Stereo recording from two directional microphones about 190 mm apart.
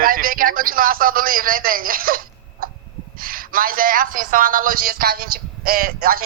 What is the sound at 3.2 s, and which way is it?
Speech, 50° right (ahead or behind).